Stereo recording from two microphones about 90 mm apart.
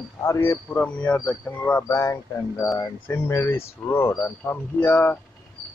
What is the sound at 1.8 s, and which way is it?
Speech, 30° left (ahead or behind).